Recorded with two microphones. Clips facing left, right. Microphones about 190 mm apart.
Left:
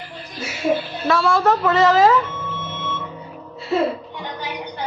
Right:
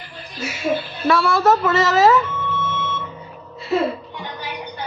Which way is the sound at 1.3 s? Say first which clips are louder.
Left 1 dB; 5° right (ahead or behind).